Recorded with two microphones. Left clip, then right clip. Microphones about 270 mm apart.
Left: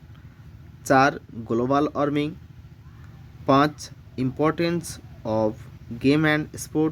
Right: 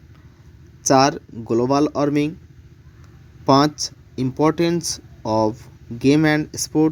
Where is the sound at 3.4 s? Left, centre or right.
Centre.